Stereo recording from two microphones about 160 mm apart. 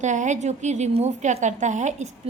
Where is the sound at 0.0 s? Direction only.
50° right (ahead or behind).